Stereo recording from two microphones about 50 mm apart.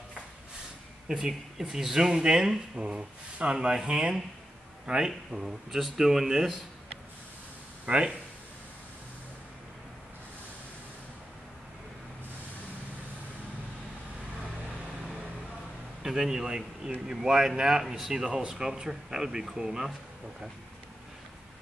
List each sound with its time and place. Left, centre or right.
1.0 s speech: centre
2.8 s speech: right
7.8 s speech: right
16.0 s speech: centre